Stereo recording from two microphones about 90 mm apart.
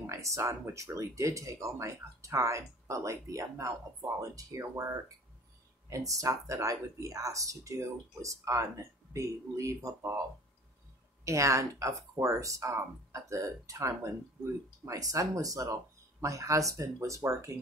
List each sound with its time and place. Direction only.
0.0 s speech: 35° right (ahead or behind)
11.2 s speech: 35° right (ahead or behind)